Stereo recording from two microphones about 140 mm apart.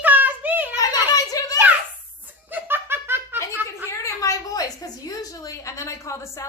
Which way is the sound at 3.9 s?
20° left (ahead or behind).